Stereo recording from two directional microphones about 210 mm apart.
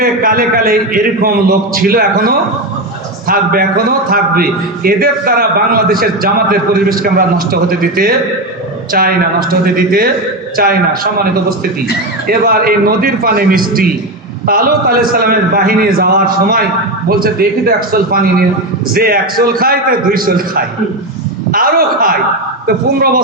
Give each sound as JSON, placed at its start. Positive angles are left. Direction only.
{"t": 0.0, "sound": "a man's voice", "side_deg": -45}